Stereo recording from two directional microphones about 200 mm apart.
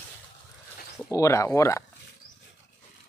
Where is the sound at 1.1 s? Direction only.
15° left (ahead or behind).